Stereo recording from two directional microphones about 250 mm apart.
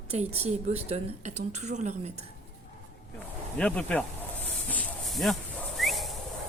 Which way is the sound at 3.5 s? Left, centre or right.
Centre.